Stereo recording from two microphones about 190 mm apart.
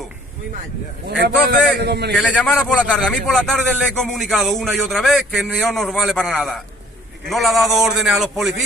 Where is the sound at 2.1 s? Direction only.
5° left (ahead or behind).